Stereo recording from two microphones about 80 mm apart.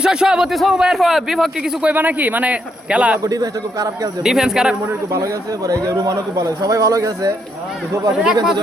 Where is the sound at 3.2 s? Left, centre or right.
Right.